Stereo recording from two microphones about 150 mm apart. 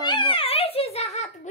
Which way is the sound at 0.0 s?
35° left (ahead or behind).